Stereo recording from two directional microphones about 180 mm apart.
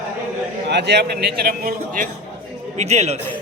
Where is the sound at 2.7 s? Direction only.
40° right (ahead or behind).